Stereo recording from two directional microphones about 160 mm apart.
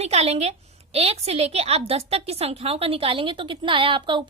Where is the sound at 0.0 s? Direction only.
40° right (ahead or behind).